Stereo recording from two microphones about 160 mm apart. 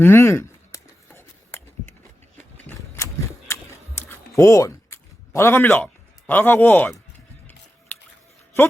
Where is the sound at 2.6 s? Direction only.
15° left (ahead or behind).